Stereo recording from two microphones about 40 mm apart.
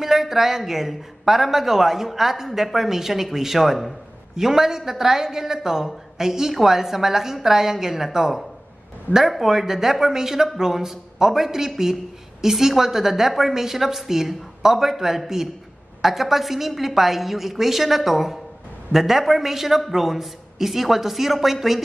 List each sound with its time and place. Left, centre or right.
0.0 s a man's voice: centre